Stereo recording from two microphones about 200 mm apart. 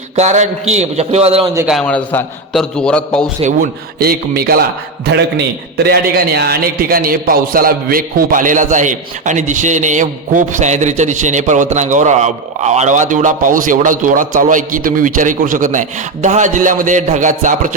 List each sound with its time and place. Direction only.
0.2 s a man's voice: 35° right (ahead or behind)
1.5 s a man's voice: 5° right (ahead or behind)
1.8 s a man's voice: 5° left (ahead or behind)
3.4 s a man's voice: 50° right (ahead or behind)
5.7 s a man's voice: 55° right (ahead or behind)